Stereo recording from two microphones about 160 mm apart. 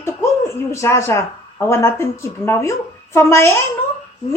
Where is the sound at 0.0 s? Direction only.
15° left (ahead or behind).